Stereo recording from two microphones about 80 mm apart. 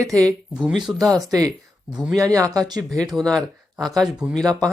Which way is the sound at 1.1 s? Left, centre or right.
Right.